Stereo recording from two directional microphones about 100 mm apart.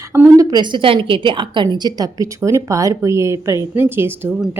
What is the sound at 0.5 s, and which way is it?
A woman's voice, 50° right (ahead or behind).